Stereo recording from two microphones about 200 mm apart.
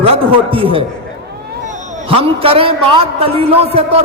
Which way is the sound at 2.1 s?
30° right (ahead or behind).